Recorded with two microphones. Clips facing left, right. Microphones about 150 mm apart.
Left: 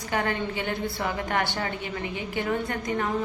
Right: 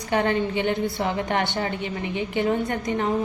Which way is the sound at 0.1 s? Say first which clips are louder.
Right 5 dB; 25° right (ahead or behind).